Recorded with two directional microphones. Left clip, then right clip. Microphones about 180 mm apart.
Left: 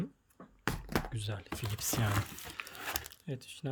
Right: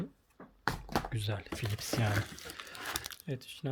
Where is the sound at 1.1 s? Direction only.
10° right (ahead or behind).